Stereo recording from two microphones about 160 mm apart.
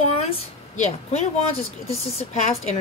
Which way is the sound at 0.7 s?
45° left (ahead or behind).